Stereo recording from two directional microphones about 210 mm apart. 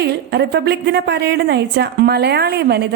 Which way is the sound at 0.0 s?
50° right (ahead or behind).